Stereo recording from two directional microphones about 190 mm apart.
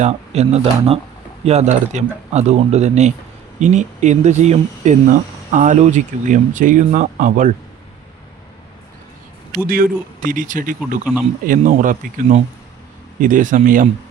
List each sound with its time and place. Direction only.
0.0 s speech: 35° right (ahead or behind)
9.6 s speech: 50° right (ahead or behind)